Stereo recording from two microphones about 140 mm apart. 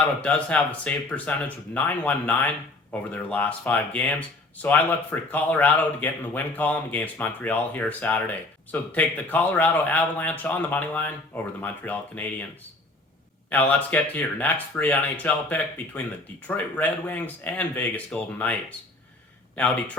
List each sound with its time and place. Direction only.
0.2 s speech: 10° left (ahead or behind)
13.5 s speech: 10° left (ahead or behind)